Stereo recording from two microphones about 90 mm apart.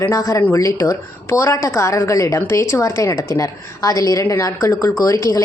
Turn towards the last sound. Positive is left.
turn(degrees=40)  # may be behind; listen again after turning